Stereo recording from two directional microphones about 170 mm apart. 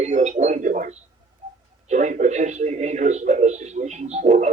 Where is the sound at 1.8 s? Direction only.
45° right (ahead or behind).